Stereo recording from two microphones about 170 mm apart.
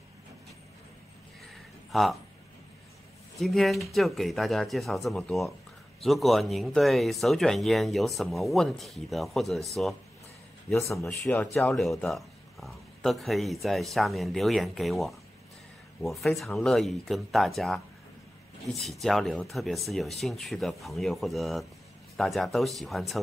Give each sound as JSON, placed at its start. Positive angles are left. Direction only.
{"t": 1.9, "sound": "speech", "side_deg": 0}
{"t": 3.3, "sound": "speech", "side_deg": 0}
{"t": 10.7, "sound": "speech", "side_deg": 15}
{"t": 11.7, "sound": "speech", "side_deg": 0}